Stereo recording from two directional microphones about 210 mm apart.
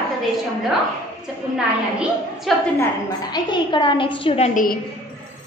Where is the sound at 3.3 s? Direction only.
20° left (ahead or behind); by 4.8 s 40° left (ahead or behind).